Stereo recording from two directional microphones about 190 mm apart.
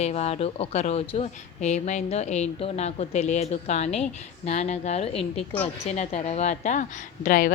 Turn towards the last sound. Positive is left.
turn(degrees=45)  # may be behind; listen again after turning